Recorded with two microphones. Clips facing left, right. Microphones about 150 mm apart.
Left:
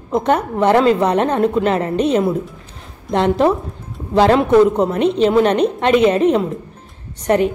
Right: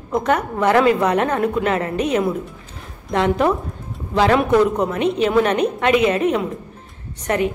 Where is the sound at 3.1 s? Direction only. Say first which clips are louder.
Left 3 dB; 30° left (ahead or behind).